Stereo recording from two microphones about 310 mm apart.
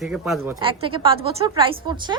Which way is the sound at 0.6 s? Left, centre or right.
Centre.